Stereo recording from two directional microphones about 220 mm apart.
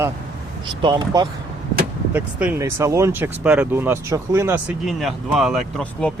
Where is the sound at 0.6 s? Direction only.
20° right (ahead or behind).